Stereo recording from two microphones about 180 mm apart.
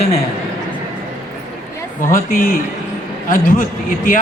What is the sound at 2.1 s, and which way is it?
Speech, 50° left (ahead or behind).